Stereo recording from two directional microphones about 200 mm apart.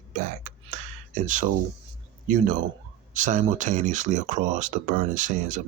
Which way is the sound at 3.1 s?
40° right (ahead or behind).